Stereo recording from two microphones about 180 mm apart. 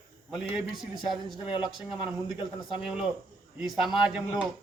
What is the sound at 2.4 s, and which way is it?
Speech, 25° left (ahead or behind).